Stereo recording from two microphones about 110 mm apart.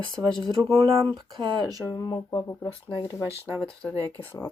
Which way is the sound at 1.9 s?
35° left (ahead or behind).